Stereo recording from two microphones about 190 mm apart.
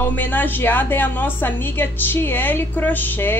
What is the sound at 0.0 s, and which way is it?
A woman's voice, 10° left (ahead or behind).